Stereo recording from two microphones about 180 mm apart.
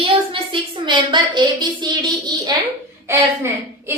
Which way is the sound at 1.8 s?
25° right (ahead or behind).